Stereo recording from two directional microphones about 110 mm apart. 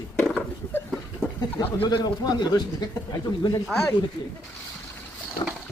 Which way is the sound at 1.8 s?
45° left (ahead or behind).